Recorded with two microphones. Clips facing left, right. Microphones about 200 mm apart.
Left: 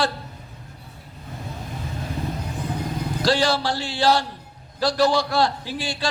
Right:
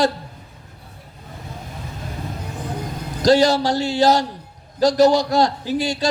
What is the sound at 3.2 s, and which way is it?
A man's voice, 40° right (ahead or behind).